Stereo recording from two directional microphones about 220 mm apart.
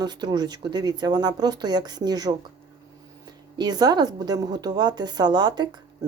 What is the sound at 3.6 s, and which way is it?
Speech, 20° right (ahead or behind).